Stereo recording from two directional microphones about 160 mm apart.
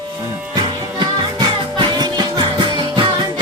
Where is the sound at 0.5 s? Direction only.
30° right (ahead or behind).